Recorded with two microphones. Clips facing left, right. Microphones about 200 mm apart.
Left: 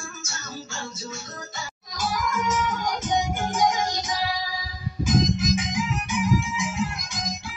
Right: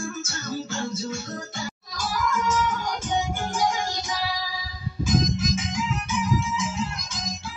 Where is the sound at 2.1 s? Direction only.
15° left (ahead or behind).